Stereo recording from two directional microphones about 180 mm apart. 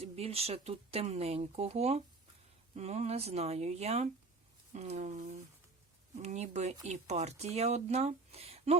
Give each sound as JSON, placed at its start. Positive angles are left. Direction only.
{"t": 0.0, "sound": "speech", "side_deg": -35}
{"t": 6.2, "sound": "speech", "side_deg": -40}